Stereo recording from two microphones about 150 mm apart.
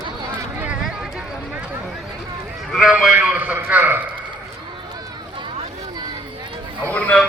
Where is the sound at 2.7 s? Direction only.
Centre (ahead or behind).